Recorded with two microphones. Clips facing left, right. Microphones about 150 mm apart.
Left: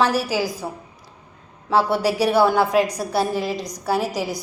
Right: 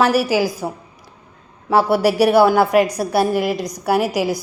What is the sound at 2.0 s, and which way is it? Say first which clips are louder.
A woman's voice: right 6 dB; 10° right (ahead or behind).